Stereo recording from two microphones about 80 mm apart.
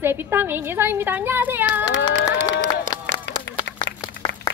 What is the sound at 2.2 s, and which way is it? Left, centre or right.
Speech, left.